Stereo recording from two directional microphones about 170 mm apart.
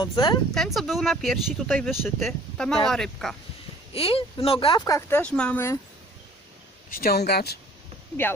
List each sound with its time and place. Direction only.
0.0 s speech: 25° left (ahead or behind)
0.5 s speech: centre (ahead or behind)
3.9 s speech: 35° left (ahead or behind)
4.9 s speech: 15° left (ahead or behind)
6.9 s speech: 65° left (ahead or behind)